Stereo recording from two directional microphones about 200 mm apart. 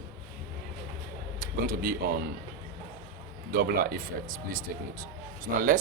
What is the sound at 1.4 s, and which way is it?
Speech, 45° right (ahead or behind).